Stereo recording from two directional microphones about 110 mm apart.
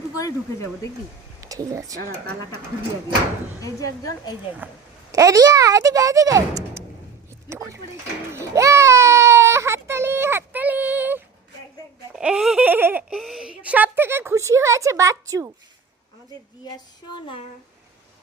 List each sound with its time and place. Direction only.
0.2 s speech: 30° left (ahead or behind)
1.4 s speech: 30° right (ahead or behind)
3.6 s a woman's voice: 30° left (ahead or behind)
4.6 s speech: 15° right (ahead or behind)
5.1 s speech: 30° right (ahead or behind)
8.3 s baby cry: 25° right (ahead or behind)
12.1 s speech: 5° right (ahead or behind)
12.6 s baby laughter: 15° right (ahead or behind)
13.1 s speech: centre (ahead or behind); by 15.5 s 30° right (ahead or behind)